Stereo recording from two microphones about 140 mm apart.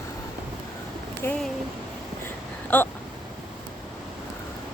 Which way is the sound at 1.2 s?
15° left (ahead or behind).